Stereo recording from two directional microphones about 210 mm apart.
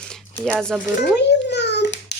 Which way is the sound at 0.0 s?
5° left (ahead or behind).